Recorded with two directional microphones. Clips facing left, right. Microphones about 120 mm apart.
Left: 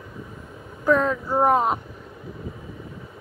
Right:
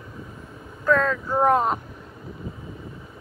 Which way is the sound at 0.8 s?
15° left (ahead or behind).